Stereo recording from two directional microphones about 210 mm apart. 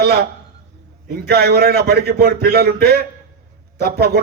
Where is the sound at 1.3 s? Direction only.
50° right (ahead or behind).